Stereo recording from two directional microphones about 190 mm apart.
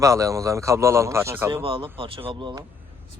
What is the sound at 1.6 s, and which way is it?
Speech, 30° right (ahead or behind).